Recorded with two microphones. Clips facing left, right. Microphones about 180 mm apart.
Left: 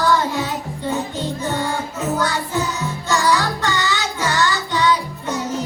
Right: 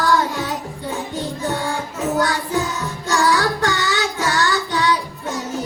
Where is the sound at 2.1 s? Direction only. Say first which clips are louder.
Right 2 dB; 50° right (ahead or behind).